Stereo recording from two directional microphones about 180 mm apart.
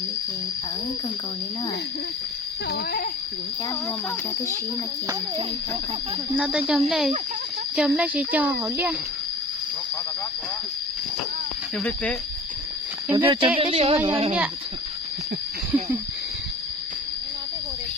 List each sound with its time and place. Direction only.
2.6 s speech: 60° left (ahead or behind)
6.3 s speech: 5° right (ahead or behind)
11.8 s speech: 5° left (ahead or behind)
13.1 s speech: 25° right (ahead or behind)
13.6 s a sound: 30° right (ahead or behind)